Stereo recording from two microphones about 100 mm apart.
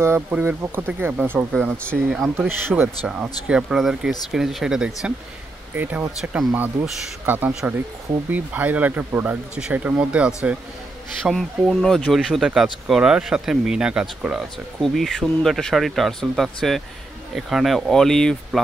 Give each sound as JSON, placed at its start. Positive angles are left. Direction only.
{"t": 0.3, "sound": "speech", "side_deg": -20}
{"t": 2.0, "sound": "speech", "side_deg": -5}
{"t": 2.3, "sound": "speech", "side_deg": -20}
{"t": 3.1, "sound": "speech", "side_deg": -10}
{"t": 11.2, "sound": "speech", "side_deg": 0}
{"t": 14.8, "sound": "speech", "side_deg": 0}